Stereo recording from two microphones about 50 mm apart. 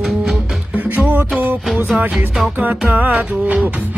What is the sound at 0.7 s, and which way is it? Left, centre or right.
Music, right.